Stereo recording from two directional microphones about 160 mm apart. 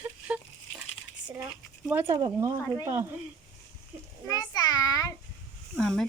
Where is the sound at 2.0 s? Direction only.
30° right (ahead or behind).